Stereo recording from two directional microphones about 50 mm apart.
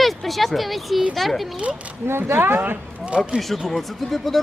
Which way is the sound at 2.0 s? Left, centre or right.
Right.